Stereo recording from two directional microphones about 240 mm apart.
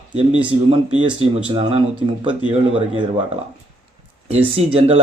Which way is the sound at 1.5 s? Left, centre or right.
Right.